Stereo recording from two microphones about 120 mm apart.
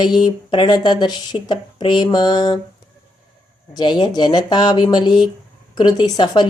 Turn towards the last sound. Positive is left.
turn(degrees=40)  # may be behind; listen again after turning